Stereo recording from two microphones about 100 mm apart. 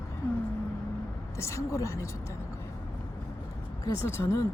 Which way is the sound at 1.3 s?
30° left (ahead or behind).